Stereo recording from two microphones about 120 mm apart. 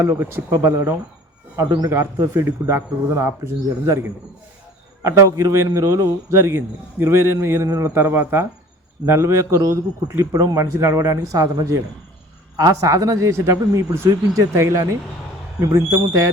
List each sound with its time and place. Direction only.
0.0 s a man's voice: 20° right (ahead or behind)